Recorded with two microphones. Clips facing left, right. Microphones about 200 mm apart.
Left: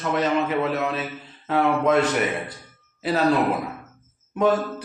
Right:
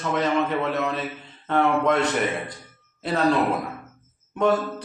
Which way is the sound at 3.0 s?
5° left (ahead or behind).